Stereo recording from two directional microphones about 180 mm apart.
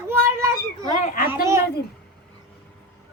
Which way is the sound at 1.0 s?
45° left (ahead or behind).